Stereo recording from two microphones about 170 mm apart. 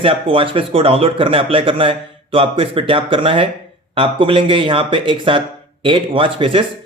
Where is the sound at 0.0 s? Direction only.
30° right (ahead or behind).